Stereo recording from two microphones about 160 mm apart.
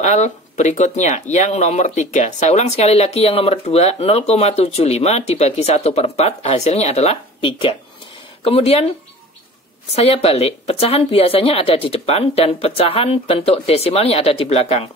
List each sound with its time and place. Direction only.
0.0 s speech: 45° left (ahead or behind)
9.9 s speech: 40° left (ahead or behind)